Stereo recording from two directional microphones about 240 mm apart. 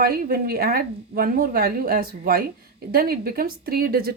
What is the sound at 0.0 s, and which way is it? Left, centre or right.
Speech, right.